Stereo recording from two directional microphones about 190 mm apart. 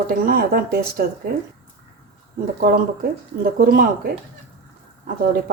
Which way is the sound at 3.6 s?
55° right (ahead or behind).